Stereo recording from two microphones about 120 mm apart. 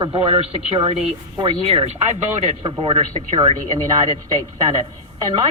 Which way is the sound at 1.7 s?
60° right (ahead or behind).